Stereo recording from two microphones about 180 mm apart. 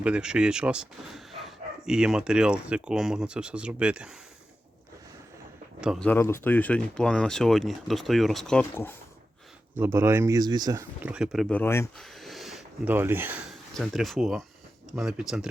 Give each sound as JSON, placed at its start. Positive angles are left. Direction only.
{"t": 0.0, "sound": "speech", "side_deg": -5}
{"t": 5.8, "sound": "speech", "side_deg": 0}
{"t": 6.1, "sound": "speech", "side_deg": 15}
{"t": 9.7, "sound": "speech", "side_deg": -15}
{"t": 11.0, "sound": "speech", "side_deg": -5}
{"t": 11.9, "sound": "speech", "side_deg": 0}
{"t": 13.5, "sound": "speech", "side_deg": 0}